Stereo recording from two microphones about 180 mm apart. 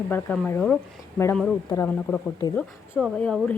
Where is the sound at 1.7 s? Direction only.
25° left (ahead or behind).